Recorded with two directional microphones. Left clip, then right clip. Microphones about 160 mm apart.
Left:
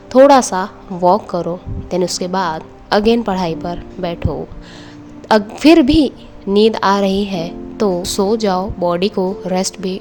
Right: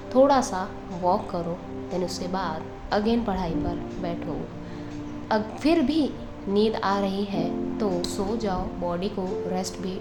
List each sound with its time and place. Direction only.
0.1 s a woman's voice: 55° left (ahead or behind)